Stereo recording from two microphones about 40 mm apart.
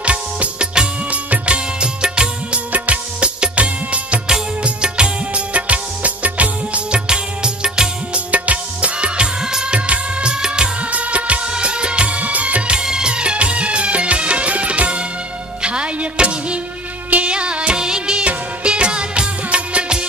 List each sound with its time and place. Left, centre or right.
0.0 s music: right
1.1 s music of bollywood: right
2.7 s music: right
4.3 s music of bollywood: right
7.1 s music of bollywood: right
8.3 s music: right; by 9.8 s centre
9.8 s music of bollywood: right
10.8 s music of bollywood: right
15.6 s music: right
18.2 s music of bollywood: right